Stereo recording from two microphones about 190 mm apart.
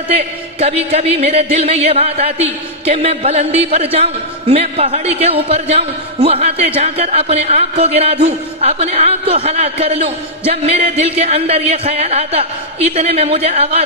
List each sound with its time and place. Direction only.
0.1 s a man's voice: 35° right (ahead or behind)